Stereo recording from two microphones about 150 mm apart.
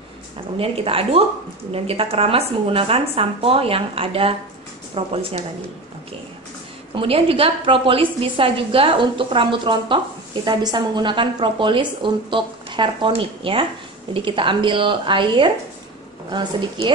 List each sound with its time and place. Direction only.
0.6 s a woman's voice: 40° right (ahead or behind)
7.0 s a woman's voice: 40° right (ahead or behind)